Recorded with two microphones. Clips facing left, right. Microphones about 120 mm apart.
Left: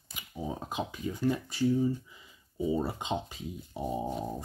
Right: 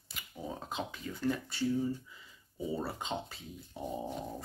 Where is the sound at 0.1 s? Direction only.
15° left (ahead or behind).